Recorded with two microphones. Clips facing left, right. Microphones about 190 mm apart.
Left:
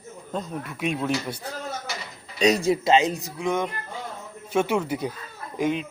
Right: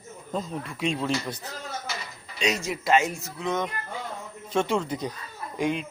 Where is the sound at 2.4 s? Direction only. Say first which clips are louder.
Left 8 dB; 35° left (ahead or behind).